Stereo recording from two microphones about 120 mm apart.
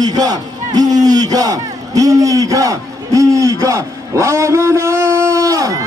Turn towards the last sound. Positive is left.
turn(degrees=-30)  # may be behind; listen again after turning